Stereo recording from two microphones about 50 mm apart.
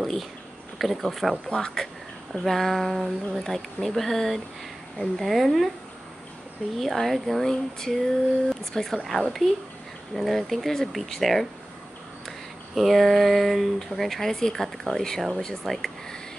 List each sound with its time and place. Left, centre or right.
0.0 s speech: centre
1.5 s speech: centre
2.3 s speech: centre
6.8 s speech: centre